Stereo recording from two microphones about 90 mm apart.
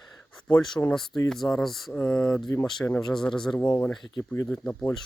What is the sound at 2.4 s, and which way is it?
Speech, 40° left (ahead or behind).